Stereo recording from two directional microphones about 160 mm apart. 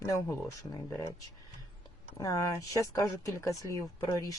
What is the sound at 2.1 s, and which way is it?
Speech, 20° left (ahead or behind).